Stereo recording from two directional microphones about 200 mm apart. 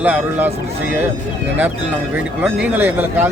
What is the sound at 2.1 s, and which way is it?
A man's voice, 10° right (ahead or behind).